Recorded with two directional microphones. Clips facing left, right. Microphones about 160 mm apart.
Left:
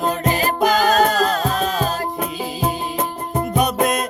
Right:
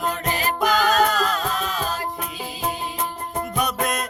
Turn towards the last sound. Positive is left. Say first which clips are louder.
# left 6 dB
turn(degrees=25)  # may be behind; listen again after turning